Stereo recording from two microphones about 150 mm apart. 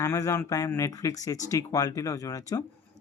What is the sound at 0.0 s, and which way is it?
Speech, 20° left (ahead or behind).